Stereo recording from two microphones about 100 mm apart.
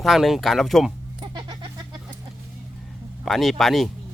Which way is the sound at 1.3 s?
50° right (ahead or behind).